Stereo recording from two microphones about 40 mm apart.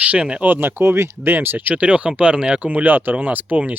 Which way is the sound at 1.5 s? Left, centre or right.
Right.